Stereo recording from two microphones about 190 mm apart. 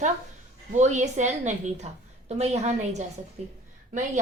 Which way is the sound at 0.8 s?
40° right (ahead or behind).